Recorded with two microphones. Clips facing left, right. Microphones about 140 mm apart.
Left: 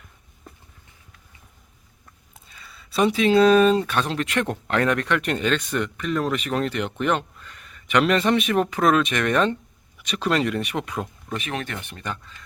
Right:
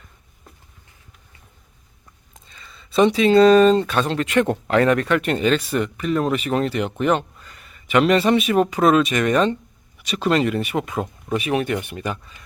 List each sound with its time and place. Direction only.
2.3 s speech: 5° left (ahead or behind); by 12.4 s 10° right (ahead or behind)